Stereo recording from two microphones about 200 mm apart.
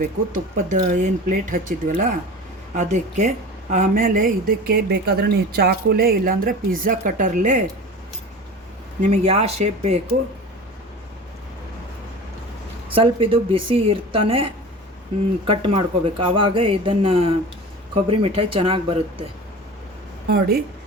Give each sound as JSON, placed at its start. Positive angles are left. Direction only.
{"t": 0.0, "sound": "speech", "side_deg": -40}
{"t": 9.0, "sound": "speech", "side_deg": -30}
{"t": 12.9, "sound": "speech", "side_deg": -25}
{"t": 15.6, "sound": "speech", "side_deg": -25}
{"t": 20.2, "sound": "speech", "side_deg": -50}